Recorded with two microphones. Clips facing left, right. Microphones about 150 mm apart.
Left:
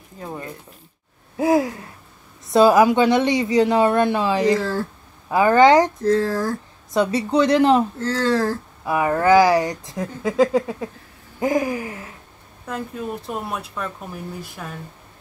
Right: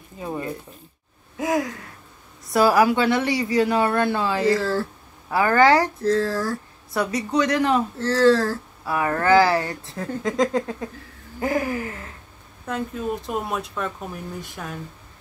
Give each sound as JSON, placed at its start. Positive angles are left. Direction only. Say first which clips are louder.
{"t": 0.2, "sound": "speech", "louder": "right 3 dB", "side_deg": -10}
{"t": 1.3, "sound": "speech", "louder": "left 5 dB", "side_deg": 30}
{"t": 8.3, "sound": "speech", "louder": "right 1 dB", "side_deg": 15}
{"t": 12.6, "sound": "speech", "louder": "right 2 dB", "side_deg": 0}